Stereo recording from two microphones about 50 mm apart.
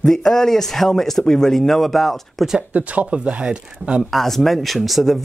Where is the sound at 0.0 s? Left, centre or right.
Centre.